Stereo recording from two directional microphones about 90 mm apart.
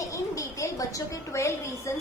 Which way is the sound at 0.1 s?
40° left (ahead or behind).